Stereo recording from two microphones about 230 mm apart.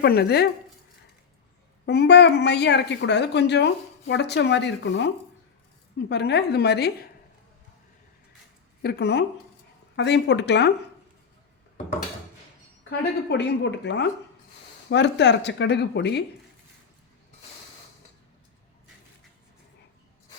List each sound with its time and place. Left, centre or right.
0.0 s a woman's voice: left
1.9 s a woman's voice: left
8.8 s a woman's voice: left
13.2 s a woman's voice: left